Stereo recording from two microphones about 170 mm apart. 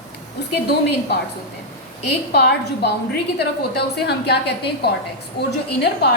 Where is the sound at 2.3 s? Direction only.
65° left (ahead or behind).